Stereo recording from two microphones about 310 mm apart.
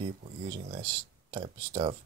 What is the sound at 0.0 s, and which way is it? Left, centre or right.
Speech, centre.